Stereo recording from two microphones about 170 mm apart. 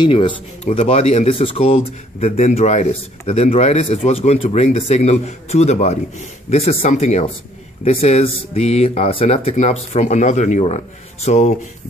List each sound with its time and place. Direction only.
0.0 s speech: 30° left (ahead or behind)